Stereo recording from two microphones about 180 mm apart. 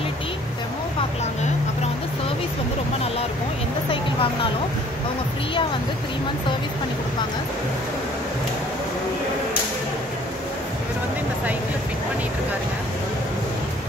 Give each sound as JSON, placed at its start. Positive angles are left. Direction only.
{"t": 3.9, "sound": "vehicle", "side_deg": 30}